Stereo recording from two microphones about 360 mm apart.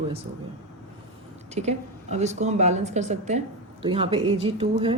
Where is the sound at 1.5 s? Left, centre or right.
Centre.